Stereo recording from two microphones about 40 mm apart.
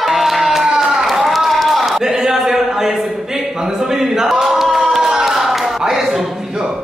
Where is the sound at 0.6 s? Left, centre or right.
Centre.